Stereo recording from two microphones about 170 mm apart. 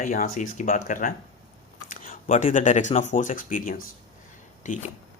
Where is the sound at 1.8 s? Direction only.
50° left (ahead or behind).